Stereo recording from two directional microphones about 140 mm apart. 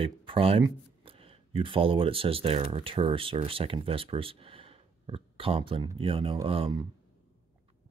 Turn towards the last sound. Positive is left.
turn(degrees=-40)  # may be behind; listen again after turning